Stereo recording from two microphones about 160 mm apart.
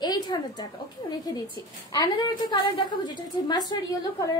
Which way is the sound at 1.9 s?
25° left (ahead or behind).